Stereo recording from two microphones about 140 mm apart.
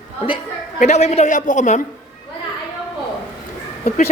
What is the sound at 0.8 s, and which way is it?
A man's voice, 50° left (ahead or behind).